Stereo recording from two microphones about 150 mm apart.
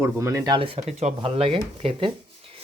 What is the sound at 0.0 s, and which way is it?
Speech, 20° right (ahead or behind).